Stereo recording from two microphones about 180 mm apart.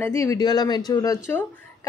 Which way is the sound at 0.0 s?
15° left (ahead or behind).